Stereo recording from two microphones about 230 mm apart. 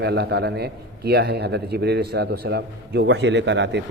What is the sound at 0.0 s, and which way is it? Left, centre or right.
A man's voice, right.